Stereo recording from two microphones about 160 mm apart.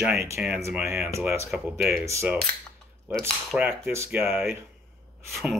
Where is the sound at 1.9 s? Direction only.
15° right (ahead or behind).